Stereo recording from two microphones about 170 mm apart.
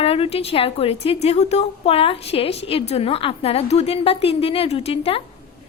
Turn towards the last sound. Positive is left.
turn(degrees=35)  # may be behind; listen again after turning